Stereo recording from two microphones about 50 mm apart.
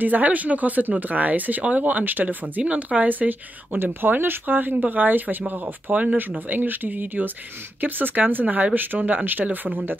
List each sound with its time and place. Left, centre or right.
0.0 s a woman's voice: right